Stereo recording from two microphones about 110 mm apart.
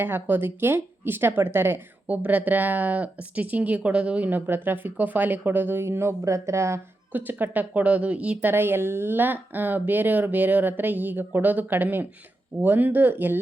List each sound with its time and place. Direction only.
0.0 s speech: 20° right (ahead or behind)